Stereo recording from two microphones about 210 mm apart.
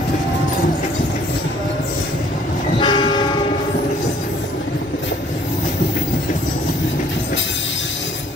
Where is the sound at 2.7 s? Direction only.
20° left (ahead or behind).